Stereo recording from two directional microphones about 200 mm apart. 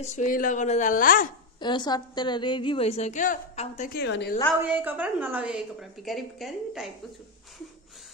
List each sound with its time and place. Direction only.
0.0 s speech: 35° left (ahead or behind)
1.6 s a woman's voice: 20° left (ahead or behind)
3.9 s a woman's voice: 55° left (ahead or behind)
4.7 s a woman's voice: 10° right (ahead or behind)